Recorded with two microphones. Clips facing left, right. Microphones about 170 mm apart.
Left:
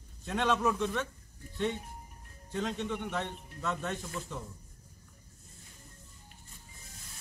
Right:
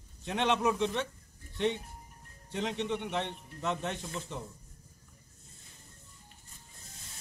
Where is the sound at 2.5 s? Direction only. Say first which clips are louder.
Right 1 dB; 20° right (ahead or behind).